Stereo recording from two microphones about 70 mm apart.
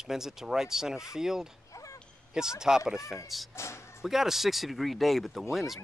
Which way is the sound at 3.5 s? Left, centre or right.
Left.